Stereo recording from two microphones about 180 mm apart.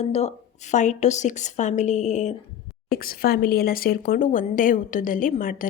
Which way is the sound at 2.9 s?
55° left (ahead or behind).